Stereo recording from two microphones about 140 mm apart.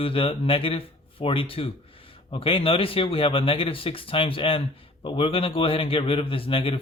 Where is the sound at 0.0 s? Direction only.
40° left (ahead or behind).